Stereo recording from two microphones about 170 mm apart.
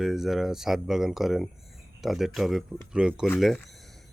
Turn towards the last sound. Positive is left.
turn(degrees=0)  # may be behind; listen again after turning